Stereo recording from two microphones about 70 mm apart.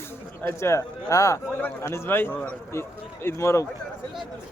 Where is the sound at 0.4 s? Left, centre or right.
Left.